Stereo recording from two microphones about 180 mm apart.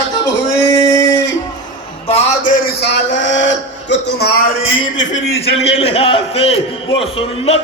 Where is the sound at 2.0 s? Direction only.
35° left (ahead or behind).